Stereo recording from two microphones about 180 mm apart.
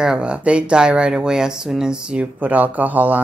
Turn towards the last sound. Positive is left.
turn(degrees=-10)  # may be behind; listen again after turning